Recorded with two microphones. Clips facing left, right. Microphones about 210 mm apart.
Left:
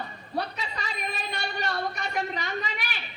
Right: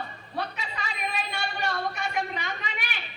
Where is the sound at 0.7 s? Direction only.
40° left (ahead or behind).